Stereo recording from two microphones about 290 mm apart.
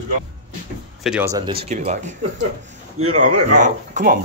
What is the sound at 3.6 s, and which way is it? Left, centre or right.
Speech, right.